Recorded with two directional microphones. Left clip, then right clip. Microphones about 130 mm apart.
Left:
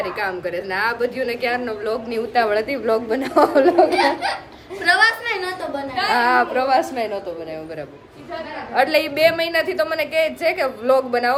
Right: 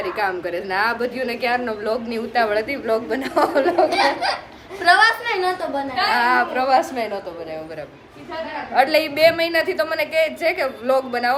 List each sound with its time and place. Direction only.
0.0 s speech: centre (ahead or behind)
2.0 s a woman's voice: 25° left (ahead or behind)
3.8 s speech: 5° left (ahead or behind)
4.8 s a woman's voice: 20° right (ahead or behind); by 5.8 s centre (ahead or behind)
6.1 s a woman's voice: 40° left (ahead or behind)
8.7 s a woman's voice: 20° left (ahead or behind)